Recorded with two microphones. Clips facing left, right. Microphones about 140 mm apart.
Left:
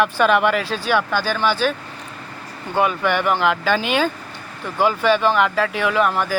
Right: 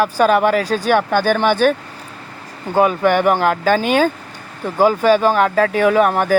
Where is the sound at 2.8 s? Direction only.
40° right (ahead or behind).